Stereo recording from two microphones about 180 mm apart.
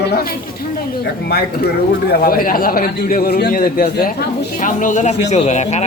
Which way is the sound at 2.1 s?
55° left (ahead or behind).